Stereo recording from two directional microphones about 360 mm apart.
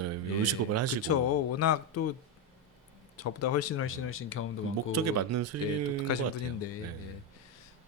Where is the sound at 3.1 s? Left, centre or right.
Left.